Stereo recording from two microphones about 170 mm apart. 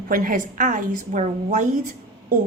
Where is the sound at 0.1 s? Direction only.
55° right (ahead or behind).